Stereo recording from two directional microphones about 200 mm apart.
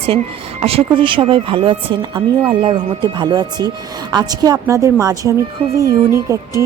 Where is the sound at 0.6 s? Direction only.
25° right (ahead or behind).